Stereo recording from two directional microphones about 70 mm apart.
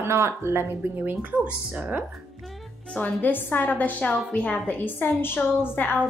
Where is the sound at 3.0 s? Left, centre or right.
Left.